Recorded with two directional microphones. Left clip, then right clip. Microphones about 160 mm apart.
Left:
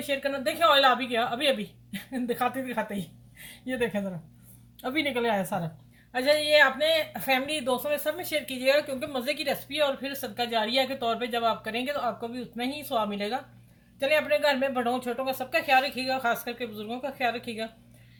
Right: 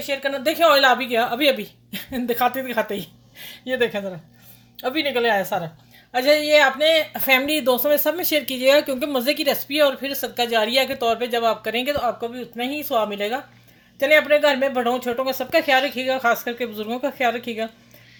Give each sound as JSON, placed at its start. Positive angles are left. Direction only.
{"t": 0.2, "sound": "speech", "side_deg": -55}
{"t": 4.8, "sound": "speech", "side_deg": -55}